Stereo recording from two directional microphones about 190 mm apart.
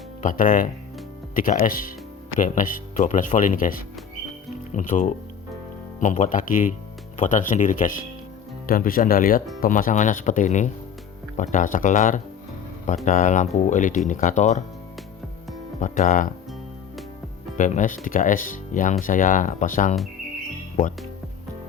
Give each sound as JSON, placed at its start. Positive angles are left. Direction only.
{"t": 0.2, "sound": "speech", "side_deg": 45}
{"t": 15.8, "sound": "speech", "side_deg": 40}
{"t": 17.6, "sound": "speech", "side_deg": 45}